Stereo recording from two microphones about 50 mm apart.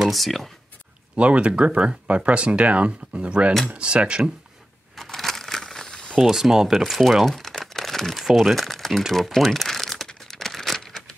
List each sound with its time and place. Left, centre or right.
0.0 s speech: centre
1.1 s speech: right
4.9 s a sound: centre
6.2 s speech: centre
9.1 s crumpling: centre